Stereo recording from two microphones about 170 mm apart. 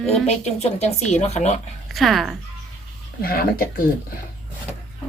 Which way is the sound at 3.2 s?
60° left (ahead or behind).